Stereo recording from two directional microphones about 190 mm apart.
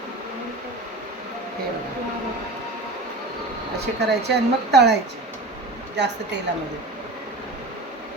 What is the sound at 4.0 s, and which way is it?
Speech, 60° right (ahead or behind).